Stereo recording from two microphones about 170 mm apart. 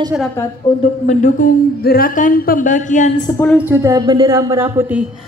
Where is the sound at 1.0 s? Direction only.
50° left (ahead or behind).